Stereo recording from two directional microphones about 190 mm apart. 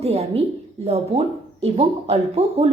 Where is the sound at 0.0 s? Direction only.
35° right (ahead or behind).